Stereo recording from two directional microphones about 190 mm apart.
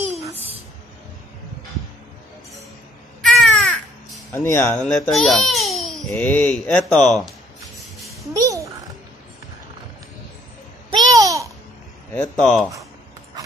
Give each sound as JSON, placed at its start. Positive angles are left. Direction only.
{"t": 3.2, "sound": "a sound", "side_deg": 5}
{"t": 4.3, "sound": "speech", "side_deg": 10}
{"t": 4.8, "sound": "speech", "side_deg": 0}
{"t": 8.3, "sound": "a sound", "side_deg": -15}
{"t": 10.9, "sound": "babbling", "side_deg": -20}
{"t": 12.1, "sound": "speech", "side_deg": 5}